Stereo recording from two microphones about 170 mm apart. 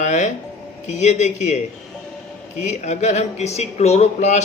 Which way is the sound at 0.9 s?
45° left (ahead or behind).